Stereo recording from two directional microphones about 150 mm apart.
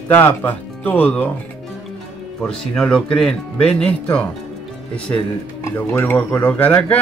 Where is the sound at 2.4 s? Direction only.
5° left (ahead or behind).